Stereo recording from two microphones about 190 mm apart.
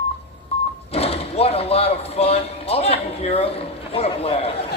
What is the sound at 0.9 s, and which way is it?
Speech, 30° left (ahead or behind).